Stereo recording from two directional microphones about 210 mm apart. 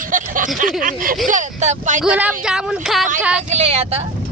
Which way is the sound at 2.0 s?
5° right (ahead or behind).